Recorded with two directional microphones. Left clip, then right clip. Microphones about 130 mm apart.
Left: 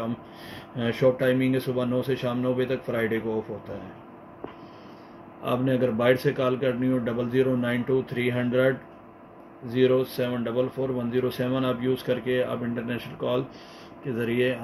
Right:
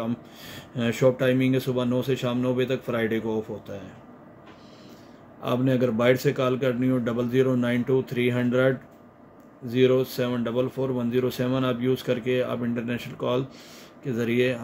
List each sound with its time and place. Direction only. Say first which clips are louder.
0.0 s speech: right 1 dB; 50° right (ahead or behind)
5.4 s a man's voice: right 1 dB; 55° right (ahead or behind)